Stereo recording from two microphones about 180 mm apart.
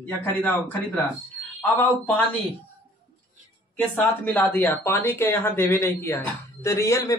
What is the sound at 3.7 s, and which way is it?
A man's voice, 10° left (ahead or behind).